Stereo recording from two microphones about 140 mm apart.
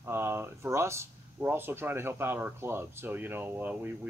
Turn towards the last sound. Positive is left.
turn(degrees=-15)  # may be behind; listen again after turning